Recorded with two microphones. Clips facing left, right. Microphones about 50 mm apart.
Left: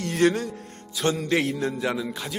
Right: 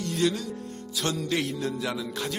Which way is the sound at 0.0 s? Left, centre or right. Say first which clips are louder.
Left 5 dB; left.